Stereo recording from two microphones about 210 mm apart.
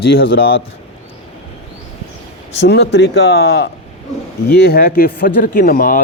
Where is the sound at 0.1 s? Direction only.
50° left (ahead or behind).